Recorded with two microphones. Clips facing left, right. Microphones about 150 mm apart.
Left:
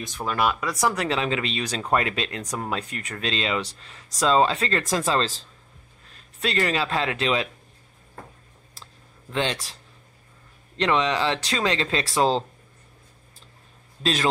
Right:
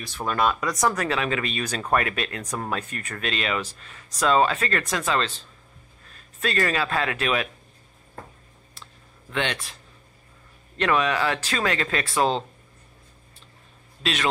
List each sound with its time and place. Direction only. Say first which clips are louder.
0.3 s speech: right 1 dB; 5° left (ahead or behind)
1.0 s speech: left 1 dB; 25° left (ahead or behind)
2.5 s speech: even; 15° left (ahead or behind); by 5.3 s 35° left (ahead or behind)
6.4 s speech: even; 25° left (ahead or behind)
9.3 s speech: left 1 dB; 30° left (ahead or behind)
10.8 s speech: even; 25° left (ahead or behind)